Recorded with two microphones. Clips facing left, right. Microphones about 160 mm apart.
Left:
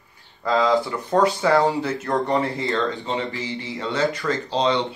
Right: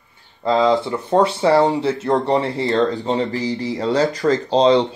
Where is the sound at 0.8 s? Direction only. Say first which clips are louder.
Right 3 dB; 25° right (ahead or behind).